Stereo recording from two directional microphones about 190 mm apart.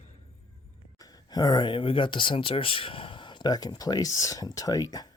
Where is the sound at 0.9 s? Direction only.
20° left (ahead or behind).